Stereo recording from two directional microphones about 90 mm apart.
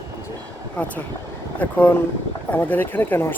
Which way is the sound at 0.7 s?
15° left (ahead or behind).